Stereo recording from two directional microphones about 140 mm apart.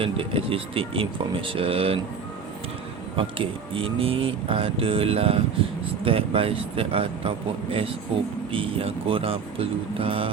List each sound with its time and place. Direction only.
0.0 s speech: 40° right (ahead or behind)
3.2 s speech: 40° right (ahead or behind)